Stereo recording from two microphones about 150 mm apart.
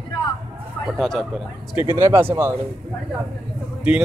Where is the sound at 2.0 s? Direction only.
15° right (ahead or behind).